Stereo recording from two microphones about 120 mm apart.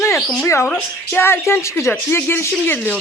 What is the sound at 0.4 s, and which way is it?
Speech, 25° left (ahead or behind).